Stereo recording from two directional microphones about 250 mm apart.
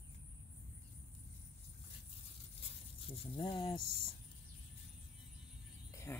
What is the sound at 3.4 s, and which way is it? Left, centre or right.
Speech, centre.